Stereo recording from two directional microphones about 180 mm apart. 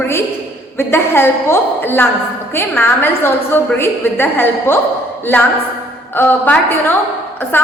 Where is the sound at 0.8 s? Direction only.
15° left (ahead or behind).